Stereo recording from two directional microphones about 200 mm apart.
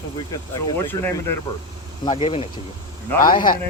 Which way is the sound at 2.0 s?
30° left (ahead or behind).